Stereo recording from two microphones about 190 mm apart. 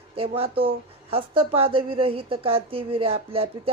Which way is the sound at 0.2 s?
30° right (ahead or behind).